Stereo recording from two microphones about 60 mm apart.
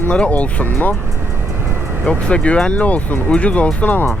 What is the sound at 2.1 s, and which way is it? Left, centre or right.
Speech, centre.